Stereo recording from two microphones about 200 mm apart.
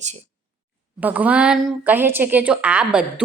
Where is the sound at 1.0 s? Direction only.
5° right (ahead or behind).